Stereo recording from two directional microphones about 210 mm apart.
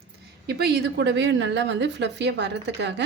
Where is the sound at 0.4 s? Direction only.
50° right (ahead or behind).